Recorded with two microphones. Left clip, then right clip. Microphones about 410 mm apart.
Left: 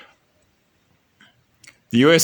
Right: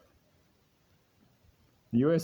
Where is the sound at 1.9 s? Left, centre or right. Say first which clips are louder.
Left 13 dB; right.